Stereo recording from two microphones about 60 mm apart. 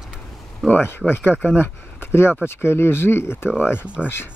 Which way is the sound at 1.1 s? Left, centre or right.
Left.